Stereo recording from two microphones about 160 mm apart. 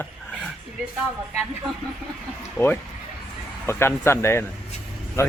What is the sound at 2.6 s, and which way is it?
A man's voice, 10° left (ahead or behind).